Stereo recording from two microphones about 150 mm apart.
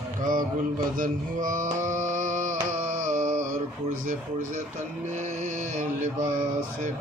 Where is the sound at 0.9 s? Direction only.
65° right (ahead or behind).